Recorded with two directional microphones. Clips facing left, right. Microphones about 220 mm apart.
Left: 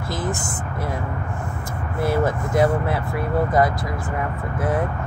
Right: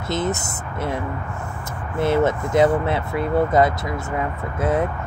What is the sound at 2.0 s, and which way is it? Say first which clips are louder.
Speech: right 3 dB; 25° right (ahead or behind).